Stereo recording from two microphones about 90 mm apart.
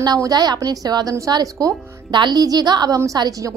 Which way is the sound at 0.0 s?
50° right (ahead or behind).